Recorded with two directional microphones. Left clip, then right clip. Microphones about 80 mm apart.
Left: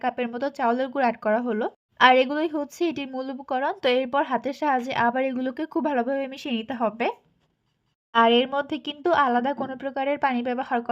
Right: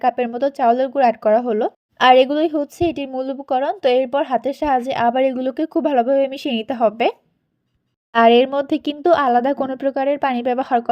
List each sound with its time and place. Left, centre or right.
0.0 s a woman's voice: right
8.6 s speech: right
9.0 s speech: right